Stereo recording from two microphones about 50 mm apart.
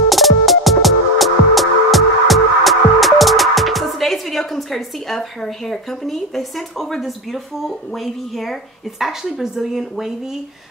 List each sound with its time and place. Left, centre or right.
0.1 s music: centre
9.0 s speech: centre